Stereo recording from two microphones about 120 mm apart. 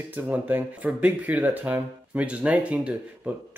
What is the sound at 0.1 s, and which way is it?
Speech, 15° right (ahead or behind).